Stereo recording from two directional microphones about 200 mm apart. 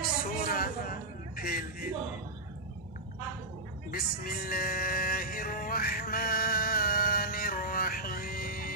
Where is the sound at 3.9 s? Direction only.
50° left (ahead or behind).